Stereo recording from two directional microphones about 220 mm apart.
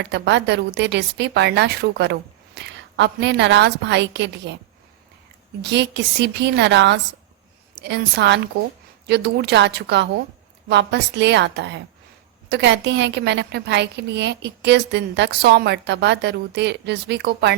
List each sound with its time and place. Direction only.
0.1 s a woman's voice: 50° right (ahead or behind)
2.6 s a sound: 50° right (ahead or behind)
2.9 s a woman's voice: 50° right (ahead or behind)
5.6 s a woman's voice: 50° right (ahead or behind)